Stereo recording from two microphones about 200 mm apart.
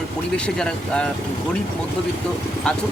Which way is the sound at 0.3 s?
5° left (ahead or behind).